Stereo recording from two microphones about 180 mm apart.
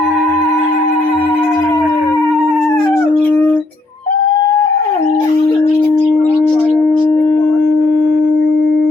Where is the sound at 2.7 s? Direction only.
5° left (ahead or behind).